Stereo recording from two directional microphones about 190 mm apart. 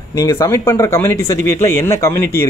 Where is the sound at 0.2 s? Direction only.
15° left (ahead or behind).